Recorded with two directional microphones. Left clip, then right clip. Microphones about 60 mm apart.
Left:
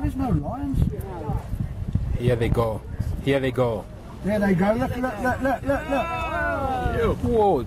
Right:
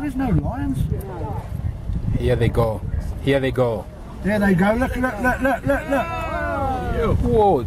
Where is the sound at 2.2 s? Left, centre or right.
Centre.